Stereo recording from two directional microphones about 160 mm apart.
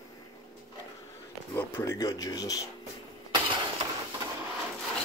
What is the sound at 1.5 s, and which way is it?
Speech, 20° left (ahead or behind).